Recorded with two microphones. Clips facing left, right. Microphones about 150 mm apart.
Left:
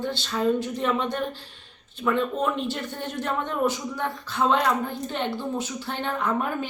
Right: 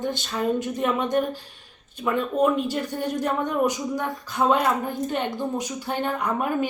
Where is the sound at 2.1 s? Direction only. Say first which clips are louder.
Right 5 dB; 10° right (ahead or behind).